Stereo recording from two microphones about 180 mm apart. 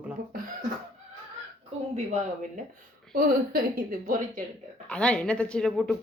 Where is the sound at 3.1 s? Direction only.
55° right (ahead or behind).